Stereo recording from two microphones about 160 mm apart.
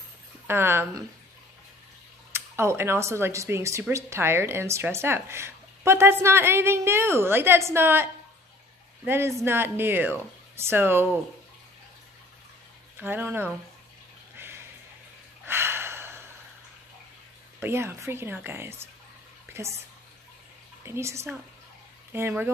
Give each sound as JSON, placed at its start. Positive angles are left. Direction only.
{"t": 0.5, "sound": "speech", "side_deg": -15}
{"t": 2.3, "sound": "speech", "side_deg": -15}
{"t": 13.0, "sound": "speech", "side_deg": -10}
{"t": 14.3, "sound": "bathtub", "side_deg": -15}
{"t": 15.4, "sound": "gasp", "side_deg": -15}
{"t": 17.6, "sound": "speech", "side_deg": -15}
{"t": 19.5, "sound": "drip", "side_deg": -15}
{"t": 20.8, "sound": "speech", "side_deg": -15}